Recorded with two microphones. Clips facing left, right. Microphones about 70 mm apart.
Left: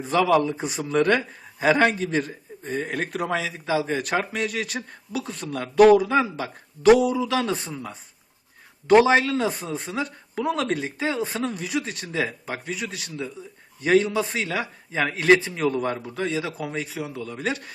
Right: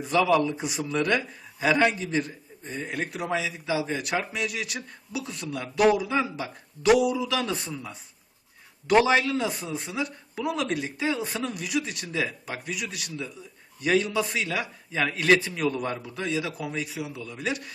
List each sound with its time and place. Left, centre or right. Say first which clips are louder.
0.0 s a man's voice: left 2 dB; left
8.9 s a man's voice: left 4 dB; left